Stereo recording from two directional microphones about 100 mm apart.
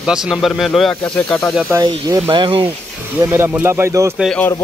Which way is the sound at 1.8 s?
45° right (ahead or behind).